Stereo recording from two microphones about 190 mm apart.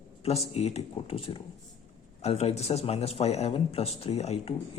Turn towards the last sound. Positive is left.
turn(degrees=35)  # may be behind; listen again after turning